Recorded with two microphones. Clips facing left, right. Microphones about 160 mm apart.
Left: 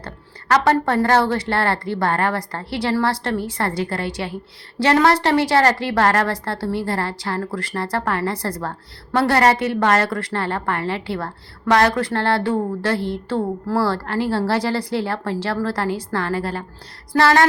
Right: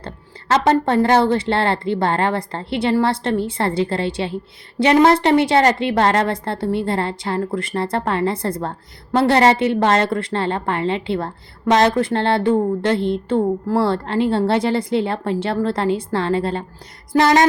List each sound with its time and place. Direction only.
0.0 s a woman's voice: 25° right (ahead or behind)